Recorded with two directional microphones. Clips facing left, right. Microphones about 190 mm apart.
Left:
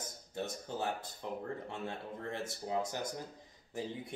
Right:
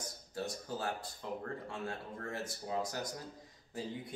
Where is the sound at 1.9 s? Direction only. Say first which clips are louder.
Left 1 dB; 25° left (ahead or behind).